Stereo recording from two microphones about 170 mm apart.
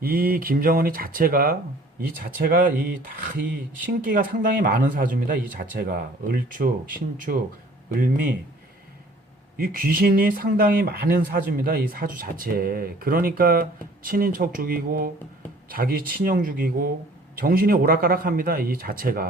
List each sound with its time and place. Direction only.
0.0 s speech: 60° right (ahead or behind)
4.0 s speech: 55° right (ahead or behind)
9.6 s speech: 60° right (ahead or behind)